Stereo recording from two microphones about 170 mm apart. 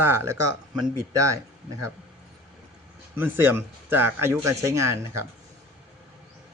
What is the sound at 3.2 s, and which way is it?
Speech, 10° right (ahead or behind).